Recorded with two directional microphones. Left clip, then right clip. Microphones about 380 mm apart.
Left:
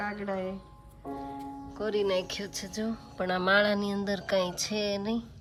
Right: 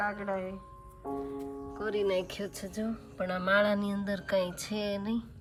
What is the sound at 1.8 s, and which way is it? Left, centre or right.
Speech, centre.